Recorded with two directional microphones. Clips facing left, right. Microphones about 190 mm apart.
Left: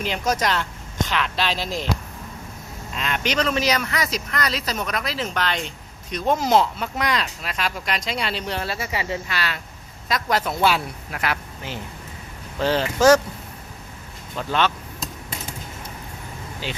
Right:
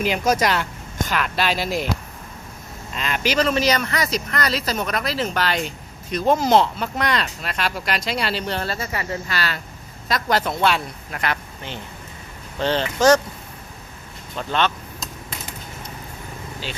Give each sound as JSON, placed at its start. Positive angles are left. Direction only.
{"t": 0.0, "sound": "speech", "side_deg": -10}
{"t": 2.9, "sound": "speech", "side_deg": 0}
{"t": 14.3, "sound": "speech", "side_deg": 5}
{"t": 16.6, "sound": "speech", "side_deg": 15}